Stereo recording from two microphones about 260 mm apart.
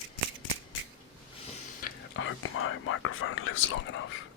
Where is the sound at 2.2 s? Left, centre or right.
Left.